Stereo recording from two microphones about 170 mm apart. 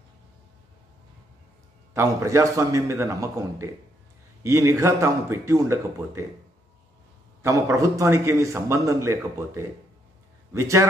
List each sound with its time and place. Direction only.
2.0 s a man's voice: 20° right (ahead or behind)
7.4 s a man's voice: 20° right (ahead or behind)